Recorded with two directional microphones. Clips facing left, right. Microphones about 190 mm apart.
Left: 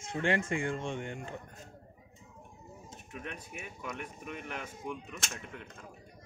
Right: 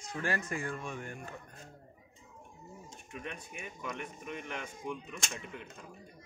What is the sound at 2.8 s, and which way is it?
Speech, 5° left (ahead or behind).